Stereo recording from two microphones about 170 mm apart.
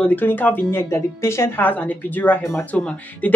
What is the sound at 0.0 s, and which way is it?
Speech, 10° left (ahead or behind).